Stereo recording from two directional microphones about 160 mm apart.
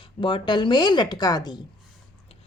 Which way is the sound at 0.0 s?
30° left (ahead or behind).